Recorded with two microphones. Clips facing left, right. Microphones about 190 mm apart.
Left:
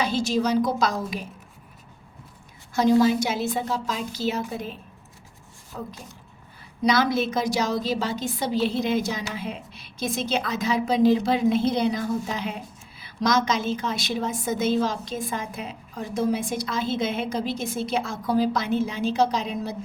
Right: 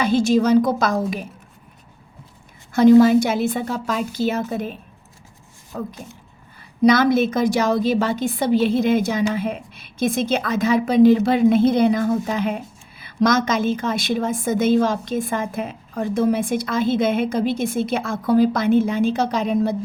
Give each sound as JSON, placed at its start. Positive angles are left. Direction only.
{"t": 0.0, "sound": "a woman's voice", "side_deg": -55}
{"t": 2.7, "sound": "a woman's voice", "side_deg": -55}
{"t": 5.7, "sound": "a woman's voice", "side_deg": -55}